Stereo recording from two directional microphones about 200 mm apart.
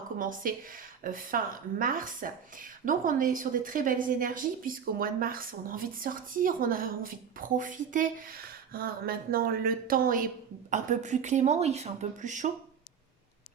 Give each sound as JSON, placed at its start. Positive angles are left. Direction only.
{"t": 0.2, "sound": "a woman's voice", "side_deg": -40}